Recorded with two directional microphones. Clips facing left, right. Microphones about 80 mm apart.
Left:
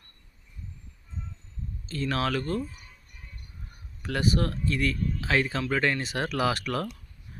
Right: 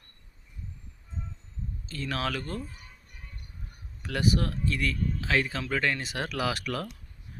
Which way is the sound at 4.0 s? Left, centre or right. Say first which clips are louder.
Left 1 dB; centre.